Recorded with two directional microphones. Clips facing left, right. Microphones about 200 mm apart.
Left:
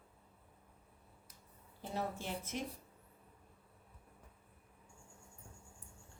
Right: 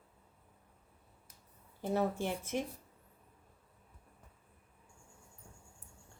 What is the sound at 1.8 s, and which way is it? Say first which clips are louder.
Speech: right 8 dB; 55° right (ahead or behind).